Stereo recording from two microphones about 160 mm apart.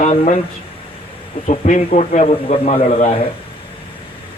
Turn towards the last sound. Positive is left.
turn(degrees=40)  # may be behind; listen again after turning